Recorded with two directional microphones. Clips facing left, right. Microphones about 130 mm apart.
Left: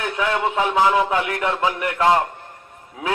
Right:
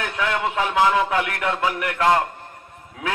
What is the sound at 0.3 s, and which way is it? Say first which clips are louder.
A man's voice: left 3 dB; 20° left (ahead or behind).